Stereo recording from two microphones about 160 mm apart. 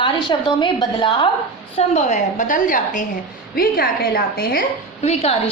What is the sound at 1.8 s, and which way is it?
A woman's voice, 45° left (ahead or behind).